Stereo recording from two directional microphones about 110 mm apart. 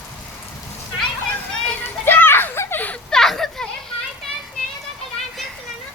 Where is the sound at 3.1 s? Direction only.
5° left (ahead or behind).